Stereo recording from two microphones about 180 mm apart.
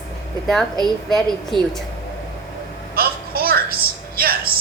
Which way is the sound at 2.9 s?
55° right (ahead or behind).